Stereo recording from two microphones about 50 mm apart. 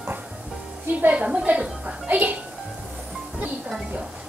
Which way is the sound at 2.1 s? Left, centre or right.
Right.